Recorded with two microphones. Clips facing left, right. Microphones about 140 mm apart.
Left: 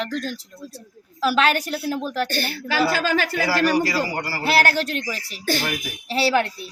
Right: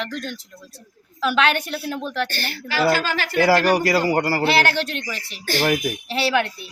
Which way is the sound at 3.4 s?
55° right (ahead or behind).